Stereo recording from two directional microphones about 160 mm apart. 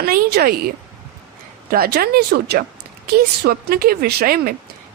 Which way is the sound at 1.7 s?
70° right (ahead or behind).